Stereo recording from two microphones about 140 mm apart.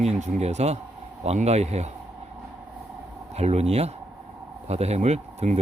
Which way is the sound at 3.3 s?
50° right (ahead or behind).